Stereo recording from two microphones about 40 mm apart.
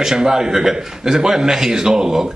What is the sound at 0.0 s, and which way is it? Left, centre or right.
A man's voice, centre.